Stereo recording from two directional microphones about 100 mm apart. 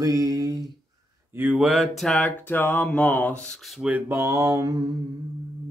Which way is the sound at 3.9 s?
25° right (ahead or behind).